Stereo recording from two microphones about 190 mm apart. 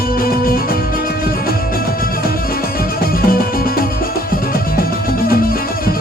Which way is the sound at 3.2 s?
50° left (ahead or behind).